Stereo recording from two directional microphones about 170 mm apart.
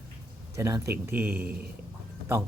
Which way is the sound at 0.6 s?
15° right (ahead or behind).